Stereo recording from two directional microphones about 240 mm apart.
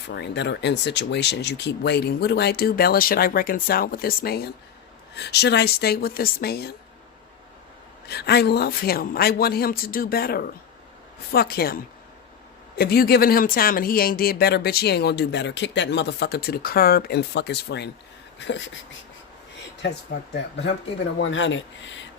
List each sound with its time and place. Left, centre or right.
0.1 s speech: left
8.0 s speech: left
21.2 s speech: left